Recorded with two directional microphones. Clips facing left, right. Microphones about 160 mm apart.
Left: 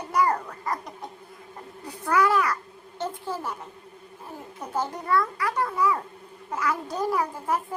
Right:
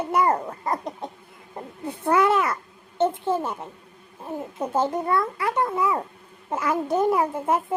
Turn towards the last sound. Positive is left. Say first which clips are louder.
# right 4 dB
turn(degrees=-25)  # may be behind; listen again after turning